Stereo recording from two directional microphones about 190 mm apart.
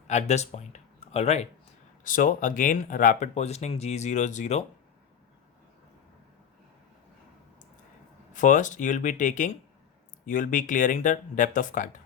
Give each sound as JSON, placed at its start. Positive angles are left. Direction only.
{"t": 0.1, "sound": "speech", "side_deg": 35}
{"t": 2.0, "sound": "speech", "side_deg": 45}
{"t": 8.3, "sound": "speech", "side_deg": 40}